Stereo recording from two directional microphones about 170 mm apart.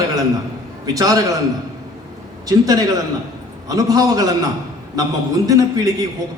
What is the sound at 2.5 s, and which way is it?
A man's voice, 20° right (ahead or behind).